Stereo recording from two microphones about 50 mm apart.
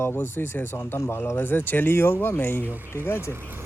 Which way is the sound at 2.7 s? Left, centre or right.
Right.